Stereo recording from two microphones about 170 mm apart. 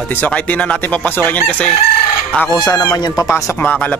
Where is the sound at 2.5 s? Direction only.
20° left (ahead or behind).